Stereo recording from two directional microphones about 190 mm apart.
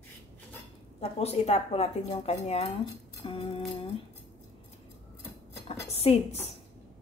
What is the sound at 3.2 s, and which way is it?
Music, 30° left (ahead or behind).